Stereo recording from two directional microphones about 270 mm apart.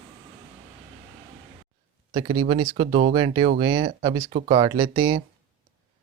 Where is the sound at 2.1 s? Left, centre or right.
Centre.